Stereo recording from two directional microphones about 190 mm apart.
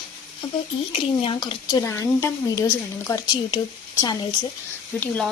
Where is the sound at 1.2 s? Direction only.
25° left (ahead or behind).